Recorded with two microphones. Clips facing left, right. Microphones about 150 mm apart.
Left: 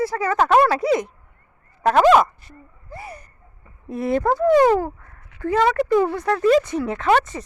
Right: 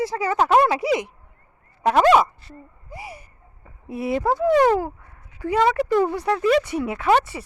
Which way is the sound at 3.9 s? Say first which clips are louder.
Left 2 dB; 10° right (ahead or behind).